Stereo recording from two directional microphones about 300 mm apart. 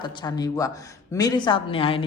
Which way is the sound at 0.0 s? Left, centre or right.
Centre.